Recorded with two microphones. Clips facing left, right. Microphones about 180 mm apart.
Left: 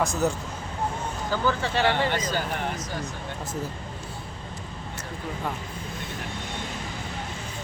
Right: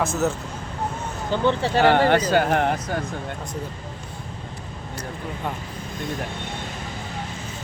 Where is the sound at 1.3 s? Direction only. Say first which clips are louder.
Right 5 dB; 30° right (ahead or behind).